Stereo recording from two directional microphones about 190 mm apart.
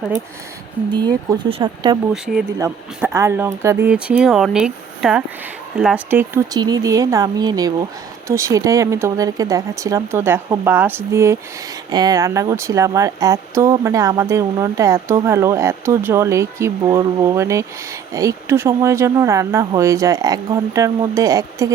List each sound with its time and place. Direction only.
0.9 s speech: 20° right (ahead or behind)